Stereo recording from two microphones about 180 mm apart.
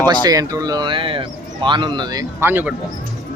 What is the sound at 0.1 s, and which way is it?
Speech, 20° right (ahead or behind).